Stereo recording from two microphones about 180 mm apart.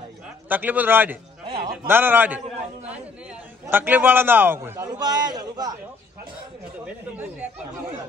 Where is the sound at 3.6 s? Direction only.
10° right (ahead or behind).